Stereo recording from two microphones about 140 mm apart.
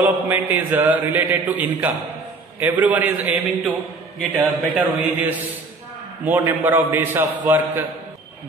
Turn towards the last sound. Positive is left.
turn(degrees=-15)  # may be behind; listen again after turning